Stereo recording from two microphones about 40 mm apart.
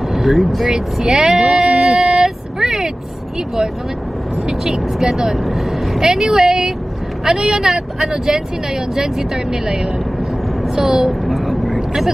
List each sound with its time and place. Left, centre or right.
0.1 s speech: centre
0.7 s vehicle: centre
4.5 s speech: centre
10.8 s speech: centre
11.1 s vehicle: centre